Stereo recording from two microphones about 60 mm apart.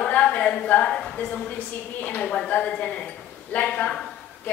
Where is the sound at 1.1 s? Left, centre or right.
Left.